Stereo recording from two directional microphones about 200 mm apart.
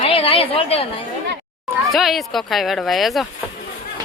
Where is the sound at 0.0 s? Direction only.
30° left (ahead or behind).